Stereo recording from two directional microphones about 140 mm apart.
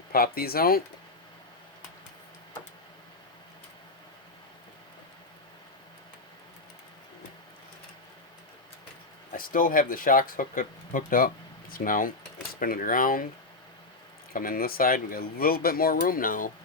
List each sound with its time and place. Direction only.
0.1 s speech: 90° left
9.3 s speech: 90° left
14.3 s speech: 90° left